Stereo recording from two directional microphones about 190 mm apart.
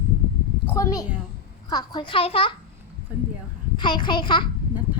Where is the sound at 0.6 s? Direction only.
15° left (ahead or behind).